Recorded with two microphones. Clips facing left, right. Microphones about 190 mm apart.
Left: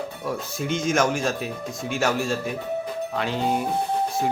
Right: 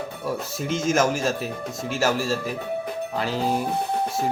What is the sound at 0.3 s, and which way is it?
Speech, centre (ahead or behind).